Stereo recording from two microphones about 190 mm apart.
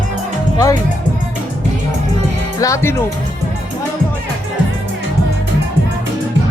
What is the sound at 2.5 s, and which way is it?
Speech, 15° left (ahead or behind).